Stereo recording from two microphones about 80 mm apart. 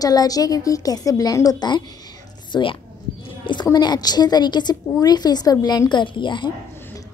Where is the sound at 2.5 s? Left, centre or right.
Left.